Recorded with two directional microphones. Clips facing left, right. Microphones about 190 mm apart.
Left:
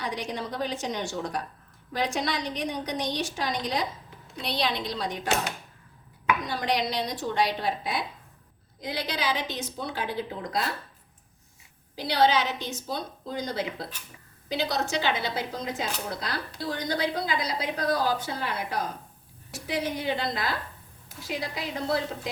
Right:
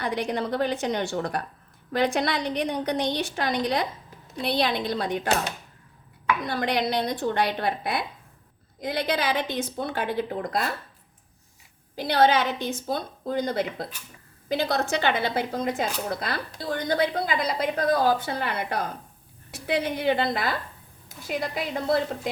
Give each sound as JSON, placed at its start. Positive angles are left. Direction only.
{"t": 0.0, "sound": "a woman's voice", "side_deg": -60}
{"t": 6.5, "sound": "a woman's voice", "side_deg": -60}
{"t": 11.9, "sound": "a woman's voice", "side_deg": -55}